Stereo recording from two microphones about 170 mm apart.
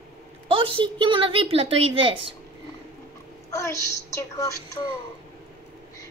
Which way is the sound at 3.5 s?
20° left (ahead or behind).